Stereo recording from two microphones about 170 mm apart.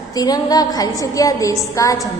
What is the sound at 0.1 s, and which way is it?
A woman's voice, 20° left (ahead or behind).